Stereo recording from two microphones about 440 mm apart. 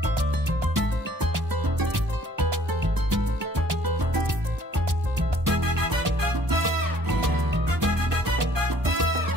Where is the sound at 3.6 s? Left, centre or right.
Right.